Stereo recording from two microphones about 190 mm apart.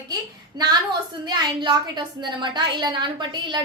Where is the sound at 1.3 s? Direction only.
25° right (ahead or behind).